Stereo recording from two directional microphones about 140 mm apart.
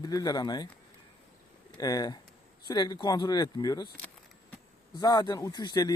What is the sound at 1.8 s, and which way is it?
Speech, 25° left (ahead or behind).